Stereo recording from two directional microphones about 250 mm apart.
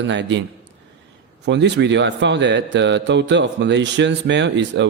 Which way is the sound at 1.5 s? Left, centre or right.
Right.